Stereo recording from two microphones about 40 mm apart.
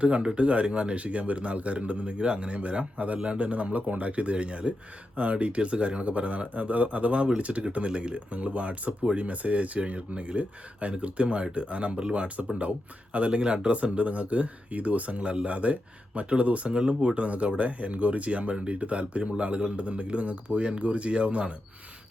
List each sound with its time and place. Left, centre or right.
0.0 s speech: right
7.5 s speech: right
13.7 s speech: right